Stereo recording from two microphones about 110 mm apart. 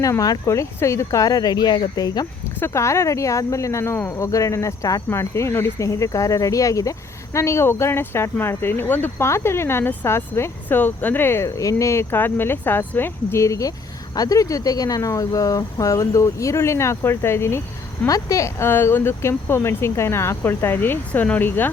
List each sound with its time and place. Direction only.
0.0 s speech: 30° left (ahead or behind)
2.6 s speech: 25° left (ahead or behind)
11.4 s speech: 30° left (ahead or behind)